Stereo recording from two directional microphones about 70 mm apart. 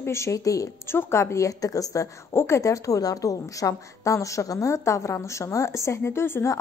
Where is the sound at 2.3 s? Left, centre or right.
Left.